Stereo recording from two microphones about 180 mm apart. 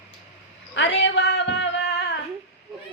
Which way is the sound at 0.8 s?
75° left (ahead or behind).